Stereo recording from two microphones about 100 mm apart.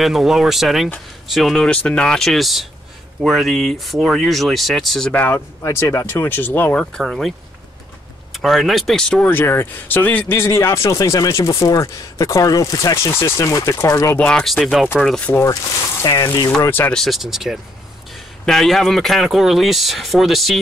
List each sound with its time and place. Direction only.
0.0 s speech: 5° right (ahead or behind)
5.1 s speech: 15° left (ahead or behind)
5.6 s speech: 30° left (ahead or behind); by 9.3 s 10° left (ahead or behind)
9.3 s speech: 20° left (ahead or behind)
14.1 s speech: 10° left (ahead or behind)
15.1 s speech: 15° left (ahead or behind)
16.0 s speech: 35° left (ahead or behind)
16.6 s speech: 20° left (ahead or behind)
16.9 s speech: centre (ahead or behind)